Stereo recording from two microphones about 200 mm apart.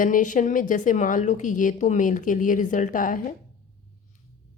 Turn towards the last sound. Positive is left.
turn(degrees=40)  # may be behind; listen again after turning